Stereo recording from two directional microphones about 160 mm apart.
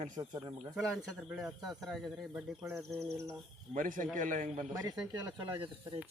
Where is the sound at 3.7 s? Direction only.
55° right (ahead or behind).